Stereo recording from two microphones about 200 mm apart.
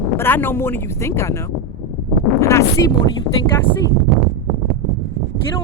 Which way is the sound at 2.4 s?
15° left (ahead or behind).